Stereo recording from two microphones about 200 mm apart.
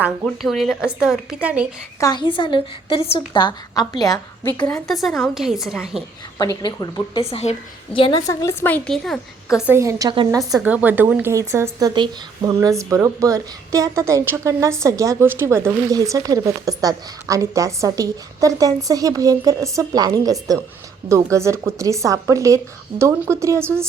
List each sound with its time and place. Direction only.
0.4 s a woman's voice: centre (ahead or behind)
2.0 s a woman's voice: 15° left (ahead or behind)
4.6 s a woman's voice: 5° left (ahead or behind)
6.4 s a woman's voice: 20° left (ahead or behind); by 9.1 s 5° left (ahead or behind)
9.6 s a woman's voice: 15° right (ahead or behind)
10.5 s a woman's voice: 5° right (ahead or behind)